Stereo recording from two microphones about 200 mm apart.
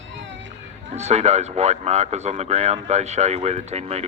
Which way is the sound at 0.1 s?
65° right (ahead or behind).